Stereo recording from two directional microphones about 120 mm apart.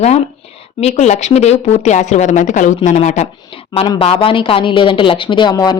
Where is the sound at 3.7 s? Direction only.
45° left (ahead or behind).